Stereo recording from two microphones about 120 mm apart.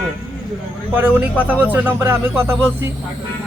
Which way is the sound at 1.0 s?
15° right (ahead or behind).